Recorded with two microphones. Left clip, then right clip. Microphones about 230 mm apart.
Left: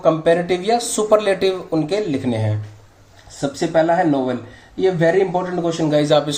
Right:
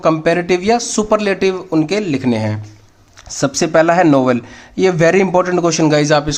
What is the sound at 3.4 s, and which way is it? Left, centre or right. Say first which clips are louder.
A man's voice: right 5 dB; right.